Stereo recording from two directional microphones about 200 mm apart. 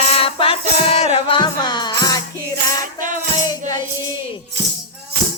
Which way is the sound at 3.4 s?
20° left (ahead or behind).